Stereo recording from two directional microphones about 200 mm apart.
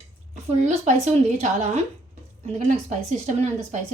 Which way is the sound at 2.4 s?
35° right (ahead or behind).